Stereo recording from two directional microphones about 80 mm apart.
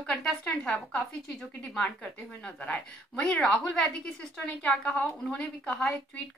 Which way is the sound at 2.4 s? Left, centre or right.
Centre.